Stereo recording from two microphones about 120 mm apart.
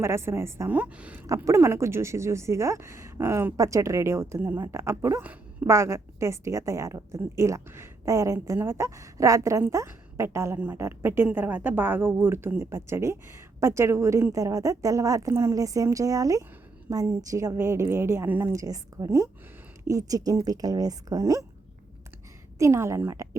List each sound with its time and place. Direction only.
0.0 s a woman's voice: 20° right (ahead or behind)
0.8 s a woman's voice: 10° right (ahead or behind)
1.5 s a woman's voice: 20° right (ahead or behind)
5.2 s a woman's voice: 15° right (ahead or behind)
18.5 s a woman's voice: 30° right (ahead or behind)
22.5 s a woman's voice: 25° right (ahead or behind)